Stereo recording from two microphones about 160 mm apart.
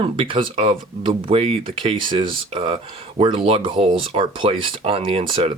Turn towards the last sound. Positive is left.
turn(degrees=-35)  # may be behind; listen again after turning